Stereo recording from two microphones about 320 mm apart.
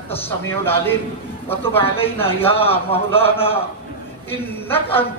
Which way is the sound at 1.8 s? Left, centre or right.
Centre.